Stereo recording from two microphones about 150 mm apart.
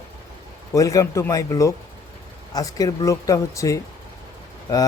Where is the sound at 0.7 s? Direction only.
20° left (ahead or behind).